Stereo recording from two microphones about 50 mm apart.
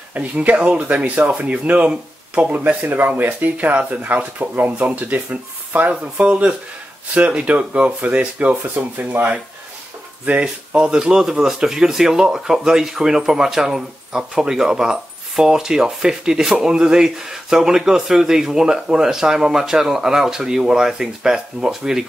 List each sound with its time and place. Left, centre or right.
0.1 s speech: right
2.5 s speech: right
10.4 s speech: centre